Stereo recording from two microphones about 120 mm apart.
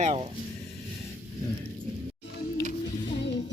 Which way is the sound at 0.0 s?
55° right (ahead or behind).